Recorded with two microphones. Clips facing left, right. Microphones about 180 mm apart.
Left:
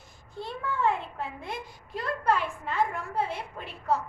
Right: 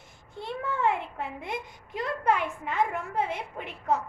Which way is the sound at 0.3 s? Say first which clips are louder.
Right 1 dB; 25° right (ahead or behind).